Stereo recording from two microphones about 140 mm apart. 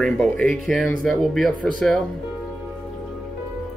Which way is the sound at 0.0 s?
5° left (ahead or behind).